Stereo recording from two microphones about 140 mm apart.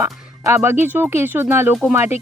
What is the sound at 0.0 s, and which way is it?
Speech, 20° right (ahead or behind).